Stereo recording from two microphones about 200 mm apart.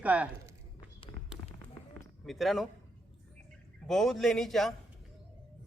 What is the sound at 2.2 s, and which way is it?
Speech, centre (ahead or behind).